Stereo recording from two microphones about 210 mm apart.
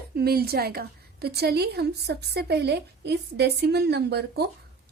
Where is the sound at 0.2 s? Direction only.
50° right (ahead or behind).